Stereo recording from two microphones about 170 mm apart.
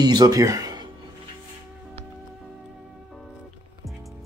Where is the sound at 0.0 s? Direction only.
25° right (ahead or behind).